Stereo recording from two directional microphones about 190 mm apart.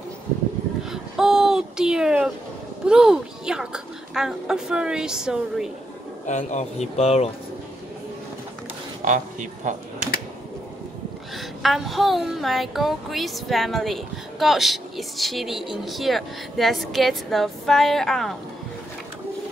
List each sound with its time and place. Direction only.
0.8 s a sound: 5° right (ahead or behind)
2.9 s speech: 5° right (ahead or behind)
6.2 s a man's voice: 40° left (ahead or behind)
9.0 s speech: 40° right (ahead or behind)
11.3 s speech: centre (ahead or behind)